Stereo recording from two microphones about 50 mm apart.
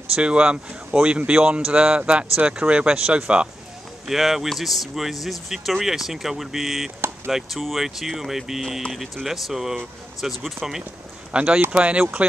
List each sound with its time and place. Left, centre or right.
0.1 s speech: right
4.1 s speech: centre
11.3 s speech: right